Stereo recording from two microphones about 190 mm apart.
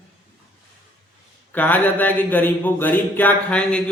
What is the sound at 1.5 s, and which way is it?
A man's voice, 10° left (ahead or behind).